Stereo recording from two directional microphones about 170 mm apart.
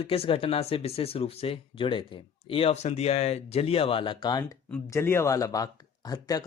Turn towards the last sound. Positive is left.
turn(degrees=20)  # may be behind; listen again after turning